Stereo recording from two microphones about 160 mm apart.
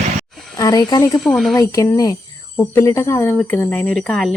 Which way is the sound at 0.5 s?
25° left (ahead or behind).